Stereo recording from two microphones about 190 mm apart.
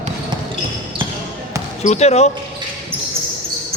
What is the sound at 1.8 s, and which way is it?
Speech, 35° left (ahead or behind).